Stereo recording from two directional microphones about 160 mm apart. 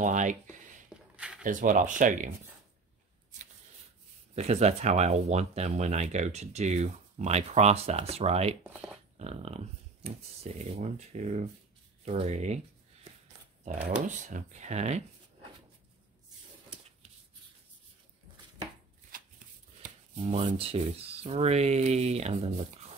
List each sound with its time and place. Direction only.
0.0 s speech: 50° right (ahead or behind)
1.1 s a sound: 5° right (ahead or behind)
1.4 s speech: 55° right (ahead or behind)
4.4 s speech: 40° right (ahead or behind)
9.1 s a sound: 40° right (ahead or behind)
10.6 s speech: 45° right (ahead or behind)
13.8 s speech: 50° right (ahead or behind)
19.1 s shuffling cards: 60° right (ahead or behind)
20.2 s speech: 35° right (ahead or behind)